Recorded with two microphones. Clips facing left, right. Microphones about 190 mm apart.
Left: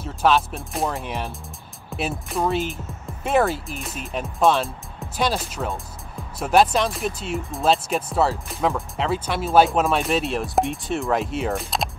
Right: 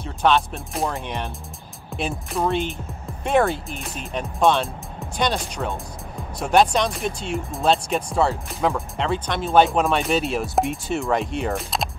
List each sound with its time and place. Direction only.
0.0 s speech: 5° left (ahead or behind)